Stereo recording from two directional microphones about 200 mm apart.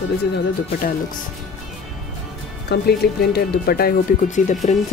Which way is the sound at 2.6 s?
50° left (ahead or behind).